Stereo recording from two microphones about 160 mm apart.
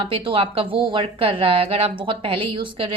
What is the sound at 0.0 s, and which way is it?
A woman's voice, 35° right (ahead or behind).